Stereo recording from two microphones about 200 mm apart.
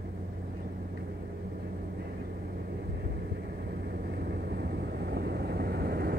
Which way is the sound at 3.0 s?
50° right (ahead or behind).